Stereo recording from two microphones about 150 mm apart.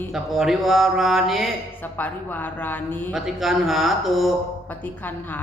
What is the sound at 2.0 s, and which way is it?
Speech, 10° left (ahead or behind).